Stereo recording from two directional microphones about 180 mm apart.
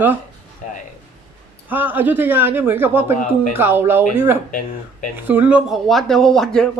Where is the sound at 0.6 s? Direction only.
40° left (ahead or behind).